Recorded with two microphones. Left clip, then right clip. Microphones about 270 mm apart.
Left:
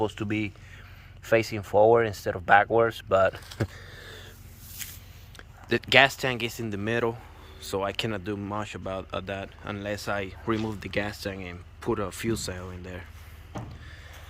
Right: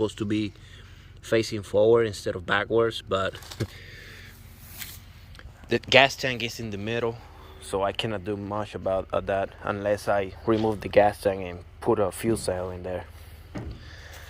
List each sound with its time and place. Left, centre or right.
0.0 s speech: centre
5.6 s speech: centre